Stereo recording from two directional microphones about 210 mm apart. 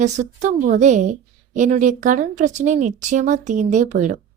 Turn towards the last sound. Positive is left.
turn(degrees=-35)  # may be behind; listen again after turning